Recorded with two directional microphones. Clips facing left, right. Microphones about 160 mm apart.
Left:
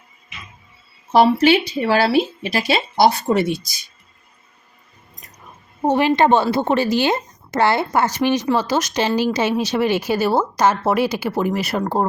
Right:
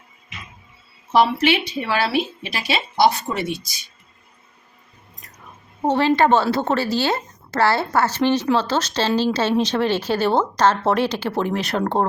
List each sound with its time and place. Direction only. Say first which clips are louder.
1.1 s speech: left 4 dB; 35° left (ahead or behind)
5.8 s a woman's voice: left 1 dB; 15° left (ahead or behind)